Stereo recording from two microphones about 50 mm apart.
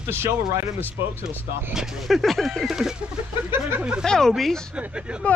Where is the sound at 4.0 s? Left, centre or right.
Centre.